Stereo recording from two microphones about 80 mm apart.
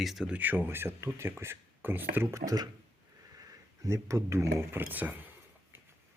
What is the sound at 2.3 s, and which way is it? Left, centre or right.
Speech, right.